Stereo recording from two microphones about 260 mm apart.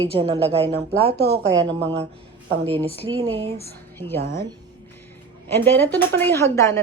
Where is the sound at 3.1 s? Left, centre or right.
Right.